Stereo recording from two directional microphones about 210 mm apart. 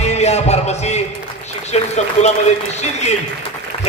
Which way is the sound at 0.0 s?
30° left (ahead or behind).